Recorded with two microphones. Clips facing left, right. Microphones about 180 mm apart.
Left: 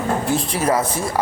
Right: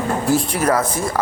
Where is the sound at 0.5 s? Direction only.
25° left (ahead or behind).